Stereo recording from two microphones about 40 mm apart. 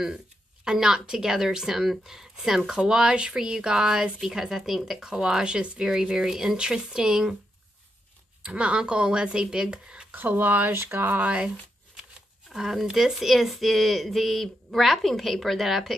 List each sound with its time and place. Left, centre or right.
0.7 s a woman's voice: centre
8.4 s speech: right
10.1 s speech: right
11.2 s speech: right
12.0 s shuffling cards: centre
12.9 s speech: centre